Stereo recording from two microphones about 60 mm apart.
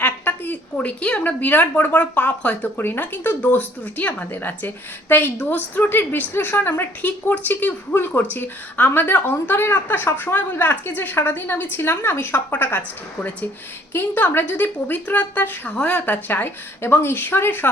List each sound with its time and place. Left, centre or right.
0.0 s a woman's voice: left
2.8 s speech: left
13.9 s speech: left